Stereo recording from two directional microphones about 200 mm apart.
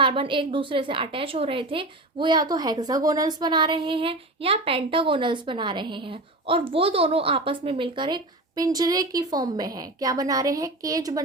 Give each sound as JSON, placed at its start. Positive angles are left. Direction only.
{"t": 0.0, "sound": "a woman's voice", "side_deg": -25}